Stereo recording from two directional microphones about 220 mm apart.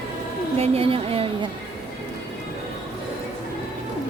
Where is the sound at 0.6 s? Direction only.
25° right (ahead or behind).